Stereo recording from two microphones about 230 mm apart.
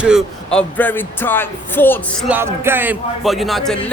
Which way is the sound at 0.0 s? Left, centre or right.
Centre.